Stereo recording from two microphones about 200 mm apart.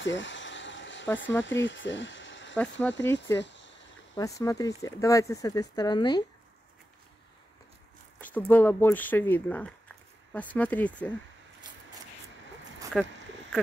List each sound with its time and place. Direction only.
0.0 s a sound: 65° left (ahead or behind)
1.4 s speech: 65° left (ahead or behind)
2.5 s speech: 5° left (ahead or behind)
3.3 s a sound: 65° left (ahead or behind)
4.1 s speech: 15° left (ahead or behind)
8.2 s speech: 10° left (ahead or behind)
12.9 s speech: centre (ahead or behind)